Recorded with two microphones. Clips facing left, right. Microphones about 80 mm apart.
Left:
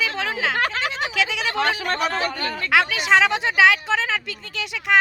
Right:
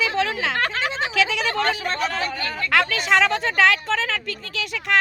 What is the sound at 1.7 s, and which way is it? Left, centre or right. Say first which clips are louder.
Speech: left 1 dB; left.